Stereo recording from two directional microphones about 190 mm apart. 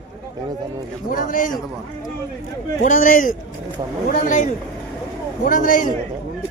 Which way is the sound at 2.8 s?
45° left (ahead or behind).